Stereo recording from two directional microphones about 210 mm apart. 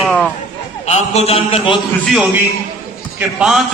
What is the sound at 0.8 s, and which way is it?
Speech, 30° left (ahead or behind).